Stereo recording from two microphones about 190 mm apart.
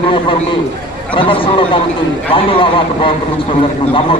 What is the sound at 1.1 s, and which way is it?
Speech, 30° left (ahead or behind).